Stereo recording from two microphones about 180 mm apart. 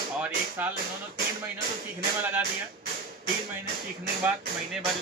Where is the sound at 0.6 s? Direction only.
10° right (ahead or behind).